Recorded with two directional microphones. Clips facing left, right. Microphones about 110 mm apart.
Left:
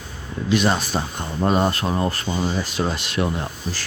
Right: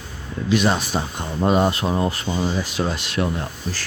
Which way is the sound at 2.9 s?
Centre (ahead or behind).